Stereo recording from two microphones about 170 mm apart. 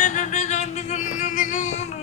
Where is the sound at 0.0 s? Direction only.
45° left (ahead or behind).